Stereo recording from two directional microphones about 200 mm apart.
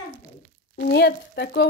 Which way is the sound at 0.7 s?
55° left (ahead or behind).